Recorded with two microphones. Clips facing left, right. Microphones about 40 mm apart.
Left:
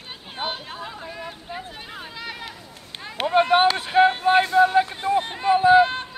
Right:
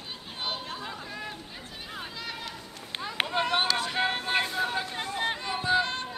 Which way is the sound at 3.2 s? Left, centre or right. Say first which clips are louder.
Left 12 dB; left.